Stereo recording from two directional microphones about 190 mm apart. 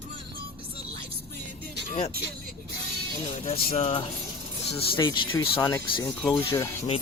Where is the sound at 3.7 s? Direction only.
35° left (ahead or behind); by 6.1 s 15° left (ahead or behind).